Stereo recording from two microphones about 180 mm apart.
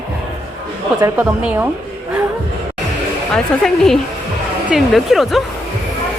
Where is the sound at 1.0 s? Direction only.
10° right (ahead or behind).